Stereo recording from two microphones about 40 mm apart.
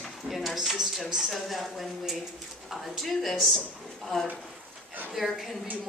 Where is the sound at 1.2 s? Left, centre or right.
Centre.